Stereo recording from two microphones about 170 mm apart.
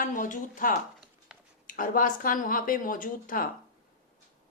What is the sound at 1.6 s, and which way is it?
A woman's voice, 55° left (ahead or behind).